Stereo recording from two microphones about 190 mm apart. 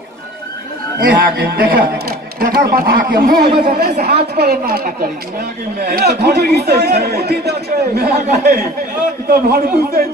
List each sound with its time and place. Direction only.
0.9 s a man's voice: 55° right (ahead or behind)
9.3 s a man's voice: 55° right (ahead or behind)